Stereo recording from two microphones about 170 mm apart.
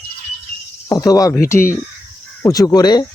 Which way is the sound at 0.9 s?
20° left (ahead or behind).